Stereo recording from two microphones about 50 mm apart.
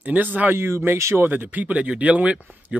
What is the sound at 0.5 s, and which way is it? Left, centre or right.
Speech, right.